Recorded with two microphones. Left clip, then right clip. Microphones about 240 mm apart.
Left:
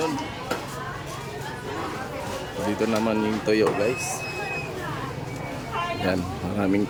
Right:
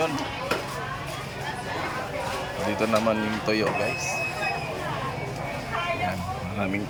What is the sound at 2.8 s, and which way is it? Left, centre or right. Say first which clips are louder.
Speech: right 1 dB; centre.